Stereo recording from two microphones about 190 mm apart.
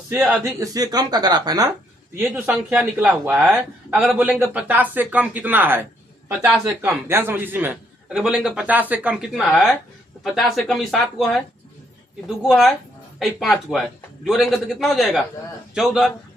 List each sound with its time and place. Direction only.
0.1 s a man's voice: 15° right (ahead or behind)
2.1 s a man's voice: 10° right (ahead or behind)
12.4 s speech: centre (ahead or behind)